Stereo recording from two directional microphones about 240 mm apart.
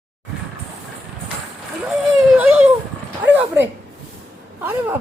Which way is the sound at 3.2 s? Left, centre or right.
Centre.